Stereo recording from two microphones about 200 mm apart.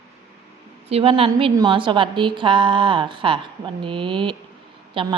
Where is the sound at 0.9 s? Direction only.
30° right (ahead or behind).